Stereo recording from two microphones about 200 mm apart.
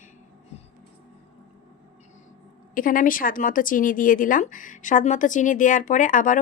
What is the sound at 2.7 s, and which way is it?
Speech, 45° left (ahead or behind).